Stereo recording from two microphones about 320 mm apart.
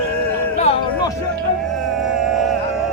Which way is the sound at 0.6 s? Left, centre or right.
Centre.